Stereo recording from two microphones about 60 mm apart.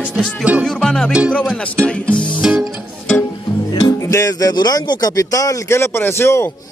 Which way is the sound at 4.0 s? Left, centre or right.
Left.